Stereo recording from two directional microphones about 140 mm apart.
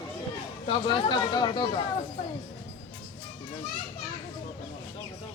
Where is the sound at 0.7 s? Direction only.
35° left (ahead or behind).